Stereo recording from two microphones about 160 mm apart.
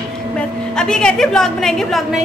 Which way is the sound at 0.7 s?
5° left (ahead or behind).